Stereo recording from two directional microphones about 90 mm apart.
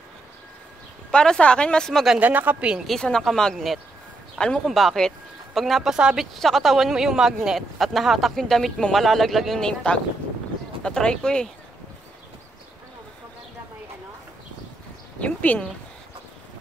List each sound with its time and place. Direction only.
1.1 s speech: 10° left (ahead or behind)
2.1 s speech: 20° right (ahead or behind)
2.9 s speech: 5° left (ahead or behind)
15.1 s speech: 15° left (ahead or behind)